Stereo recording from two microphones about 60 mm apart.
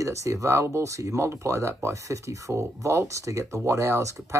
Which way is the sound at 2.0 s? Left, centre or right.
Right.